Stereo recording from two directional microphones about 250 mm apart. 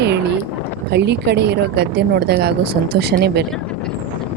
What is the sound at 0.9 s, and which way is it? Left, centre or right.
Speech, right.